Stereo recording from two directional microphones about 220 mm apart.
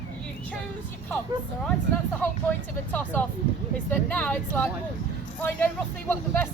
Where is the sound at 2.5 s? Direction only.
10° left (ahead or behind).